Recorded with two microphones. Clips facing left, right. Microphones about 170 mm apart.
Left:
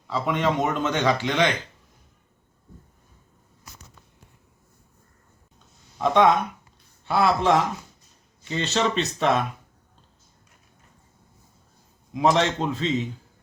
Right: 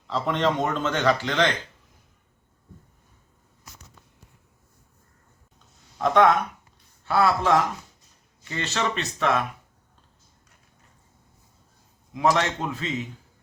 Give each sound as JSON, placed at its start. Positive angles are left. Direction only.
{"t": 0.1, "sound": "a man's voice", "side_deg": 5}
{"t": 6.0, "sound": "a man's voice", "side_deg": 15}
{"t": 8.4, "sound": "speech", "side_deg": 25}
{"t": 12.1, "sound": "speech", "side_deg": 25}